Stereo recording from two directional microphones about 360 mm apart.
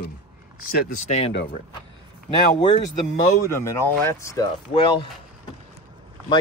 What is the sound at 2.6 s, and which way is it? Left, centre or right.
Speech, centre.